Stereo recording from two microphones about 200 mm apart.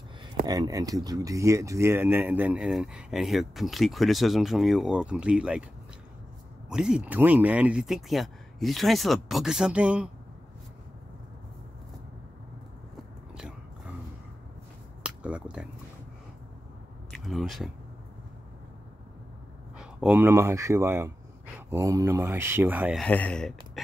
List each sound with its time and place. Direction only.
0.5 s speech: 20° right (ahead or behind)
6.7 s speech: 5° right (ahead or behind)
13.3 s biting: 5° right (ahead or behind)
15.0 s a sound: 5° right (ahead or behind)
17.1 s speech: centre (ahead or behind)
19.8 s speech: 5° right (ahead or behind)
22.9 s speech: 5° left (ahead or behind)